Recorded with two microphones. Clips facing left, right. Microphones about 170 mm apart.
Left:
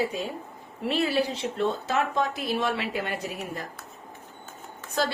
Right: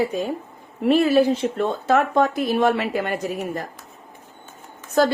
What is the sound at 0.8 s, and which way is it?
Speech, 45° right (ahead or behind).